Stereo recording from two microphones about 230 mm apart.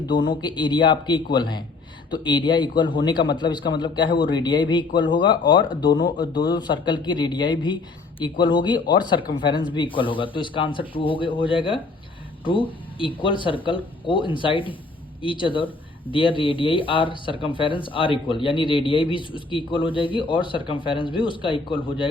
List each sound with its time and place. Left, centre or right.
0.4 s speech: centre
13.0 s speech: left